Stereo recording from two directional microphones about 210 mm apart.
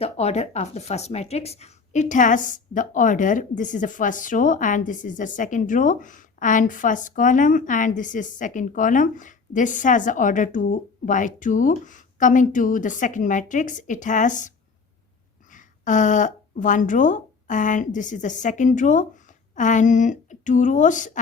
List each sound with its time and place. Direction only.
0.0 s a woman's voice: 30° left (ahead or behind)
15.5 s a woman's voice: 35° left (ahead or behind)